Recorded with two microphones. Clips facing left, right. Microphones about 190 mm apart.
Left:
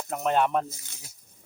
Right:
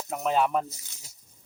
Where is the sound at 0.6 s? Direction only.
55° left (ahead or behind).